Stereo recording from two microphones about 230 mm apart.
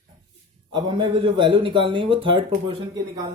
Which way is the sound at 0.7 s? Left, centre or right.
Centre.